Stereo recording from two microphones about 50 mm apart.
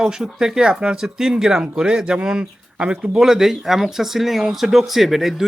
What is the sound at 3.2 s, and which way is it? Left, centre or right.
Speech, centre.